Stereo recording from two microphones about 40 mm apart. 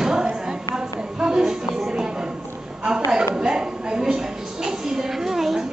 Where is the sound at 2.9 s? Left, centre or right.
Centre.